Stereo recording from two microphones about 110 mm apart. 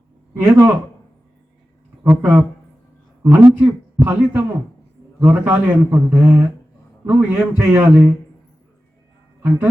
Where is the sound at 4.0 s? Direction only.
20° right (ahead or behind).